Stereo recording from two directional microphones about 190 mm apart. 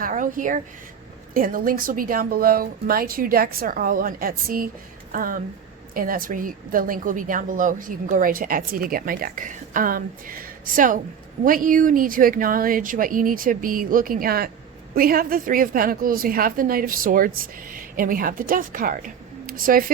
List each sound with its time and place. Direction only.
0.0 s a woman's voice: 45° right (ahead or behind)